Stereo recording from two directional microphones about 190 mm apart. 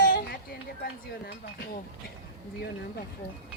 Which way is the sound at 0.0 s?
50° left (ahead or behind).